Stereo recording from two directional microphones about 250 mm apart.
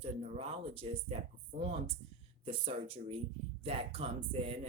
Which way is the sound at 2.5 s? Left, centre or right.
Right.